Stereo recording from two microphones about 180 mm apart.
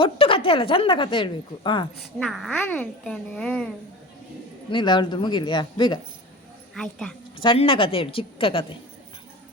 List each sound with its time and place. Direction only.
0.0 s a woman's voice: 30° left (ahead or behind)
2.0 s a child's voice: centre (ahead or behind)
4.7 s a woman's voice: 25° left (ahead or behind)
6.7 s a child's voice: 5° left (ahead or behind)
7.3 s a woman's voice: 30° left (ahead or behind)